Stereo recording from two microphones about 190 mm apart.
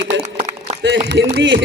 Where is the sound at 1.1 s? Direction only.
70° right (ahead or behind).